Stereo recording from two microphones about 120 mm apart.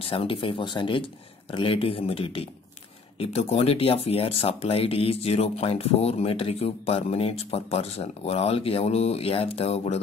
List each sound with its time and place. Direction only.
0.0 s speech: 50° left (ahead or behind)